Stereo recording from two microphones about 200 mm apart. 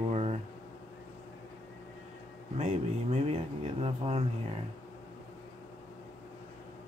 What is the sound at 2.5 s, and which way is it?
Speech, 35° right (ahead or behind).